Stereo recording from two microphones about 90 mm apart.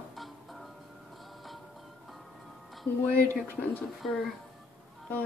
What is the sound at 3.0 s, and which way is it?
Speech, 15° left (ahead or behind).